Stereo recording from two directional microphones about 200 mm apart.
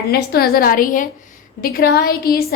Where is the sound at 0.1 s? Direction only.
50° left (ahead or behind).